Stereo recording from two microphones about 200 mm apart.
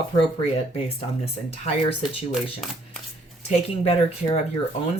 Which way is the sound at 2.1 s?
25° left (ahead or behind).